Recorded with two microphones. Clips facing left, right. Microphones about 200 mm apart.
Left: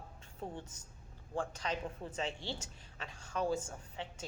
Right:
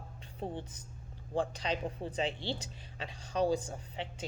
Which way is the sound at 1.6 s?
15° right (ahead or behind).